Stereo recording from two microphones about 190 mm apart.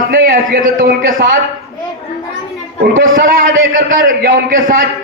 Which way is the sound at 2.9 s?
45° right (ahead or behind).